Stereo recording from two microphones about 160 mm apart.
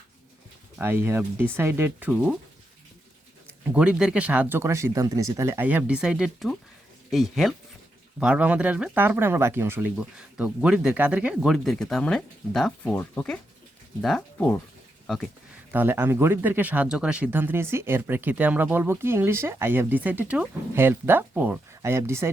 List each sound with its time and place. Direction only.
0.8 s speech: 15° right (ahead or behind)
3.6 s speech: 5° right (ahead or behind)
15.7 s speech: 10° right (ahead or behind)